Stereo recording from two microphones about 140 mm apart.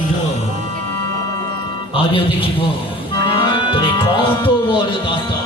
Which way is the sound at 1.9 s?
40° left (ahead or behind).